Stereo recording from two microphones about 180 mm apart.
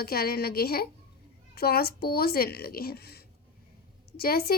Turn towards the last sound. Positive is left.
turn(degrees=55)  # may be behind; listen again after turning